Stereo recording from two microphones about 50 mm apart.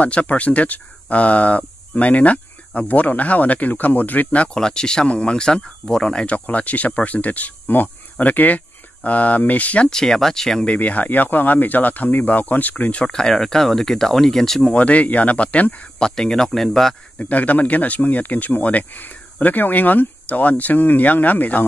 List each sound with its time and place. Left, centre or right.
0.0 s speech: left
4.6 s speech: centre
6.2 s speech: left
9.8 s speech: centre
10.7 s speech: left
13.1 s speech: centre
14.7 s speech: left
16.0 s speech: centre
17.2 s speech: left